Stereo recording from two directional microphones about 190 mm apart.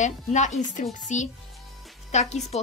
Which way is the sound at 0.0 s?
40° left (ahead or behind).